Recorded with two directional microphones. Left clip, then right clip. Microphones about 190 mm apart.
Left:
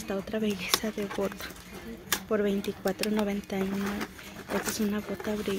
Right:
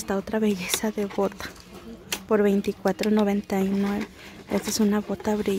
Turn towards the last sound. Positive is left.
turn(degrees=-45)  # may be behind; listen again after turning